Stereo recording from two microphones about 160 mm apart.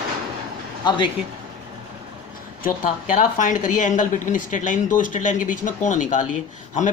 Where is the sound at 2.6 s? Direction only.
60° left (ahead or behind).